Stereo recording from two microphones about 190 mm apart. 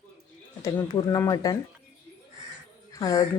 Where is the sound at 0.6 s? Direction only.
15° left (ahead or behind).